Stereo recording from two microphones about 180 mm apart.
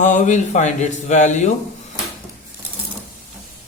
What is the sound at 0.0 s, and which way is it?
Speech, 40° left (ahead or behind).